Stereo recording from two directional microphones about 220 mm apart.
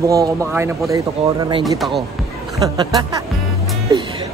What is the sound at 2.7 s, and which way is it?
Speech, 15° right (ahead or behind).